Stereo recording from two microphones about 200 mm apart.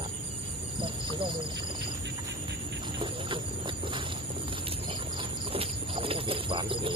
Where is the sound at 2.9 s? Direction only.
25° right (ahead or behind).